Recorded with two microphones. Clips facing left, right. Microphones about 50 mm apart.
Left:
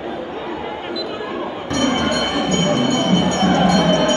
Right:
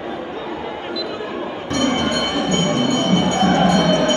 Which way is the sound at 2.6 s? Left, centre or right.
Left.